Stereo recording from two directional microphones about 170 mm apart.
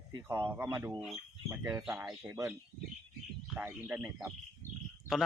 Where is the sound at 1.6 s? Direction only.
15° right (ahead or behind).